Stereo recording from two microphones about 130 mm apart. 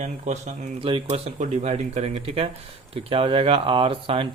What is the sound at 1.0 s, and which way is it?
Speech, 55° right (ahead or behind).